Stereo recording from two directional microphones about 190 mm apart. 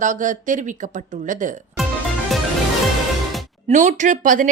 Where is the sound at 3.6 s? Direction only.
40° right (ahead or behind).